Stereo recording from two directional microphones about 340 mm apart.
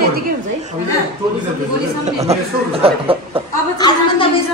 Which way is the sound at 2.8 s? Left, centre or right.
Centre.